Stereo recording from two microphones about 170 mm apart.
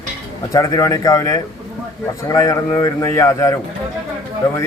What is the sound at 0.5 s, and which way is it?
A man's voice, 20° left (ahead or behind).